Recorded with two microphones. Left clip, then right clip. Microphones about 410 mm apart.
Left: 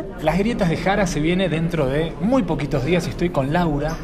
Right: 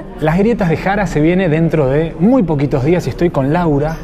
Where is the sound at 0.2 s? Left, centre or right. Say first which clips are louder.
Right 7 dB; right.